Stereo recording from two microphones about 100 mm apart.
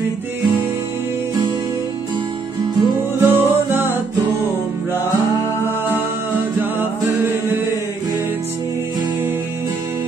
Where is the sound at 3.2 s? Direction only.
20° right (ahead or behind).